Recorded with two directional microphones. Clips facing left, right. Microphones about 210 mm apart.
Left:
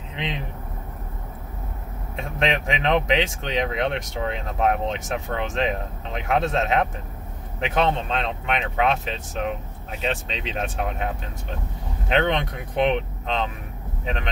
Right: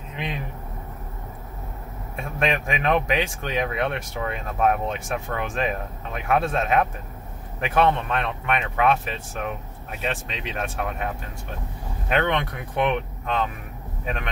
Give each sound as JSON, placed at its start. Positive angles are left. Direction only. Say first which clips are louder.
{"t": 0.1, "sound": "a sound", "louder": "left 1 dB", "side_deg": 20}
{"t": 2.1, "sound": "speech", "louder": "even", "side_deg": 20}
{"t": 12.1, "sound": "speech", "louder": "left 1 dB", "side_deg": 20}
{"t": 14.0, "sound": "speech", "louder": "left 1 dB", "side_deg": 20}